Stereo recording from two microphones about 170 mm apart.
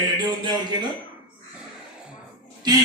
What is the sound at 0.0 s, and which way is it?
Speech, 25° right (ahead or behind).